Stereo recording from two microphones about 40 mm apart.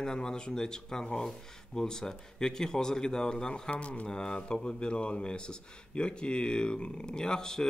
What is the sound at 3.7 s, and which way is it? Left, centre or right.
Speech, left.